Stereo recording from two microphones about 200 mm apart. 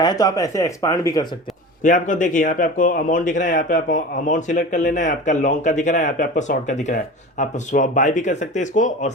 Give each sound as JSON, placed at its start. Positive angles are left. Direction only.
{"t": 0.0, "sound": "speech", "side_deg": 20}
{"t": 1.8, "sound": "a man's voice", "side_deg": 40}